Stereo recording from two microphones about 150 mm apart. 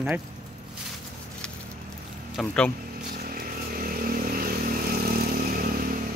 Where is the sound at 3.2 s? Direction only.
75° right (ahead or behind).